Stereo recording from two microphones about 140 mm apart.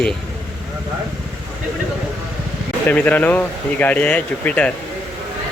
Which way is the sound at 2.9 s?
10° left (ahead or behind).